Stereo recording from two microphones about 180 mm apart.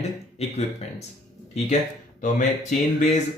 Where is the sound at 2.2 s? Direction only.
45° left (ahead or behind).